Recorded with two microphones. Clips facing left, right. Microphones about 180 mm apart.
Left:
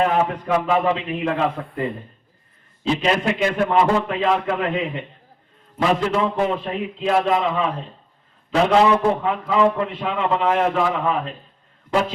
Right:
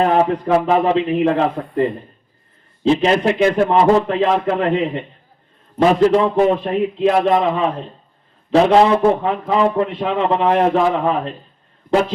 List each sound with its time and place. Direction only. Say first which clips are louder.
0.0 s a man's voice: right 4 dB; 35° right (ahead or behind)
2.8 s a man's voice: right 6 dB; 30° right (ahead or behind)